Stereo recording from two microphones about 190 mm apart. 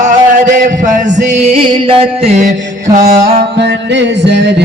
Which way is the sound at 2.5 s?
45° right (ahead or behind).